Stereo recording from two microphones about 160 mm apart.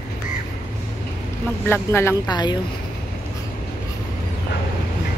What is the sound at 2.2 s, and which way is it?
Speech, 25° left (ahead or behind).